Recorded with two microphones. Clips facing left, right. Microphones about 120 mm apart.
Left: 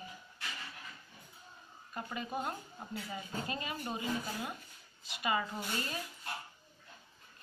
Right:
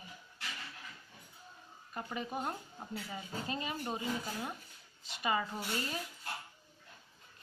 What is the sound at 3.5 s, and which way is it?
Speech, 25° right (ahead or behind).